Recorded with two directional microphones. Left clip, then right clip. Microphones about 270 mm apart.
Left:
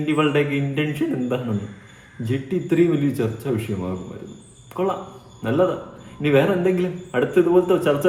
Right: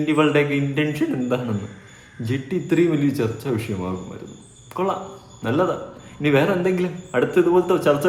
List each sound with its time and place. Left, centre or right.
0.0 s a man's voice: centre